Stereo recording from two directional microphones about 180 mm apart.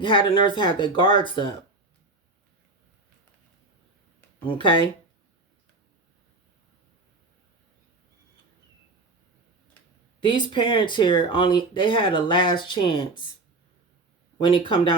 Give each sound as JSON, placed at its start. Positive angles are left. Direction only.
{"t": 0.0, "sound": "speech", "side_deg": 25}
{"t": 4.4, "sound": "speech", "side_deg": 25}
{"t": 10.2, "sound": "speech", "side_deg": 25}
{"t": 14.3, "sound": "speech", "side_deg": 25}